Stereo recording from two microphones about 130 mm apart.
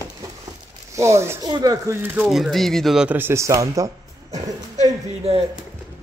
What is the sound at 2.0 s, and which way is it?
Speech, 15° right (ahead or behind).